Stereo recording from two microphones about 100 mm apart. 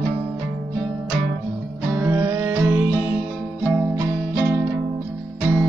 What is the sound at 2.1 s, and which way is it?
Music, 25° right (ahead or behind).